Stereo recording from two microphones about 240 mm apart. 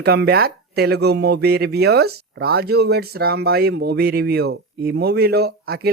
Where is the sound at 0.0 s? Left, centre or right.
Right.